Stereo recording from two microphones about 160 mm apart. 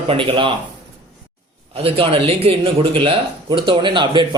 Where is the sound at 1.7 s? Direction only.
35° right (ahead or behind).